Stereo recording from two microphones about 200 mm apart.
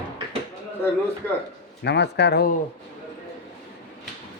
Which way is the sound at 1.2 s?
10° left (ahead or behind).